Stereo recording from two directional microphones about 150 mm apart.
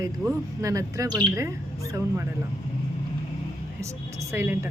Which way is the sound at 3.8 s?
20° right (ahead or behind).